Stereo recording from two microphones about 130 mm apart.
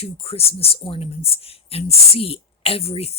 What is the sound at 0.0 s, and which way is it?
Speech, 50° left (ahead or behind).